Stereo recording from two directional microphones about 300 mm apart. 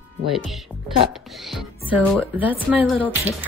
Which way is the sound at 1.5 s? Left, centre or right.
Centre.